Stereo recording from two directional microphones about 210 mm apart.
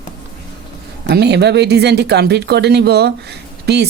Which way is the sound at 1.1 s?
50° right (ahead or behind).